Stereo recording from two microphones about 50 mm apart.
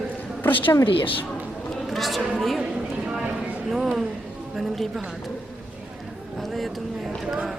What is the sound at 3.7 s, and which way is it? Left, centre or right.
Speech, centre.